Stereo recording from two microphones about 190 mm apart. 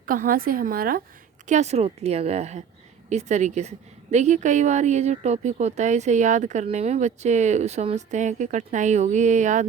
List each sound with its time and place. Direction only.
0.0 s a woman's voice: 45° right (ahead or behind)
1.5 s a woman's voice: 35° right (ahead or behind)